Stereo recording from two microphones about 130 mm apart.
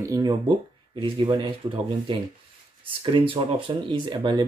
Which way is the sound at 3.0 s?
40° right (ahead or behind).